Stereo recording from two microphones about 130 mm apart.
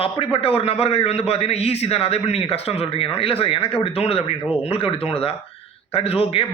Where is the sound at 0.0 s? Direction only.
45° left (ahead or behind).